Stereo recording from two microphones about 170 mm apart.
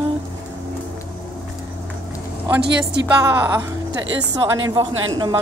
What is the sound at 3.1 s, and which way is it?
A woman's voice, 10° right (ahead or behind).